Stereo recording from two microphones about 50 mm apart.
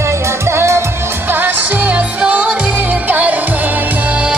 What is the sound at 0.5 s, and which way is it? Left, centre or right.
Music, right.